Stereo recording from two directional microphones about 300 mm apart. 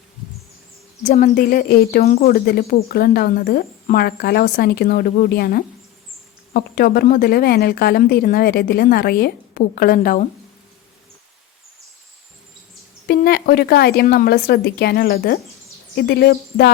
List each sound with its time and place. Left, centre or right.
1.0 s a woman's voice: left
13.1 s a woman's voice: left